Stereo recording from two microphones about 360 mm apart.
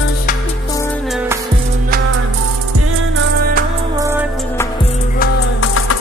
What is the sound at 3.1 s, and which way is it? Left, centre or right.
Music, right.